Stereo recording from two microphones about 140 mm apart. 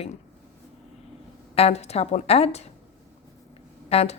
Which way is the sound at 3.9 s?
45° left (ahead or behind).